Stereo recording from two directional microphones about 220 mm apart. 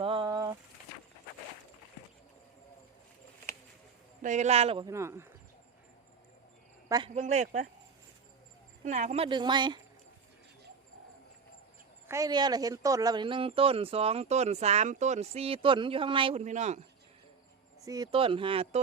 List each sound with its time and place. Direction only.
0.0 s a sound: 25° right (ahead or behind)
4.2 s speech: 35° right (ahead or behind); by 5.3 s 10° right (ahead or behind)
6.8 s speech: 15° right (ahead or behind)
7.1 s speech: 30° right (ahead or behind)
8.8 s speech: 35° right (ahead or behind)
12.0 s speech: 15° right (ahead or behind); by 16.8 s 30° right (ahead or behind)
17.8 s speech: 15° right (ahead or behind)